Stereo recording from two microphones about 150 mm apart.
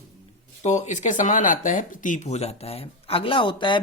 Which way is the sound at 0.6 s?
50° left (ahead or behind).